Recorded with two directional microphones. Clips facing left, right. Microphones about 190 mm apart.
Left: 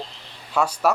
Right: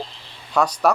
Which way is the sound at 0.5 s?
5° left (ahead or behind).